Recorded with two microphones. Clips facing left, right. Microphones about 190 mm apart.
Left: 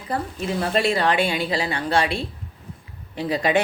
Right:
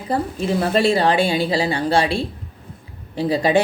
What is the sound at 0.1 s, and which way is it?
Speech, 35° right (ahead or behind).